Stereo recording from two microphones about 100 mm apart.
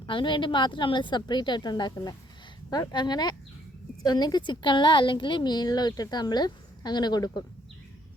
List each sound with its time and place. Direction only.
0.0 s a woman's voice: 55° left (ahead or behind)